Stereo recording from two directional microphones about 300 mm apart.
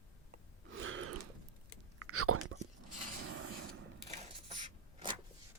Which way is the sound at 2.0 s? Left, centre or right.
Right.